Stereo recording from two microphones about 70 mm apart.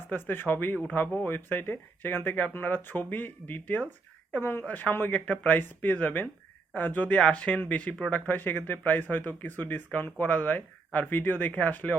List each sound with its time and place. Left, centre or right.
0.1 s speech: left